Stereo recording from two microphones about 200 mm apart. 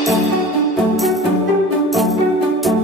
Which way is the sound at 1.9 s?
Centre (ahead or behind).